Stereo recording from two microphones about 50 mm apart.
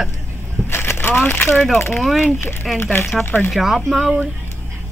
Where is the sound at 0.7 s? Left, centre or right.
Left.